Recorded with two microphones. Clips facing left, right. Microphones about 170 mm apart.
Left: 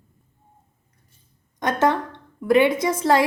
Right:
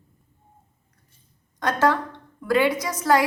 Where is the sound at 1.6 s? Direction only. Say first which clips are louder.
Left 1 dB; 20° left (ahead or behind).